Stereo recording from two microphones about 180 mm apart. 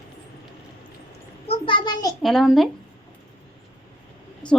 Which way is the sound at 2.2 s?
Centre (ahead or behind).